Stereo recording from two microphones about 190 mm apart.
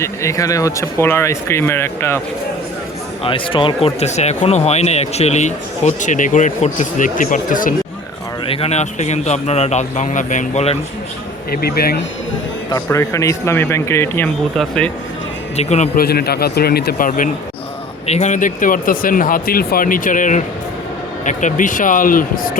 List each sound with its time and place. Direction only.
0.0 s speech: 15° left (ahead or behind)
3.2 s speech: 25° left (ahead or behind); by 7.8 s 45° left (ahead or behind)
8.4 s speech: 30° left (ahead or behind)
11.5 s speech: 55° left (ahead or behind)
12.7 s speech: 15° left (ahead or behind)
15.5 s speech: 35° left (ahead or behind)
16.0 s a man's voice: 55° left (ahead or behind)
18.0 s speech: 35° left (ahead or behind)